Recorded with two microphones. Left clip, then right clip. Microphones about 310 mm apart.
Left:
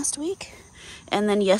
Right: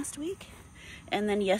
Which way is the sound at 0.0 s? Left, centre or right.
Centre.